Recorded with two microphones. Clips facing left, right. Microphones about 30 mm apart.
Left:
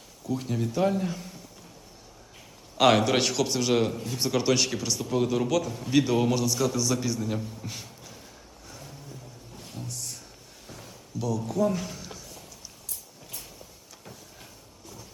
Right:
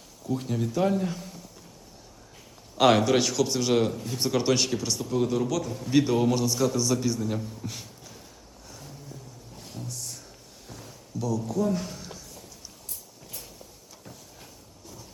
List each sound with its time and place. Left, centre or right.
0.3 s a man's voice: centre
2.7 s a man's voice: centre
5.0 s a man's voice: centre
5.9 s a man's voice: centre
9.8 s a sound: left
11.2 s a man's voice: centre
11.5 s a man's voice: left
11.9 s a sound: centre